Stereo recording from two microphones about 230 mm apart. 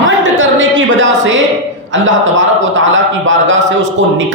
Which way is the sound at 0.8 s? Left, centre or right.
Right.